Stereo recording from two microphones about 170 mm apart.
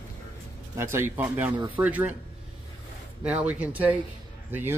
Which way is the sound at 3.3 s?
5° right (ahead or behind).